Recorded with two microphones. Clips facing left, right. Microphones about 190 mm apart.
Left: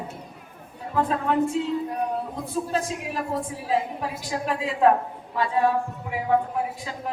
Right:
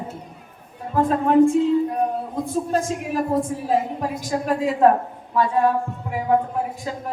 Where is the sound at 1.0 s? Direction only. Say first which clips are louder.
Right 6 dB; 45° right (ahead or behind).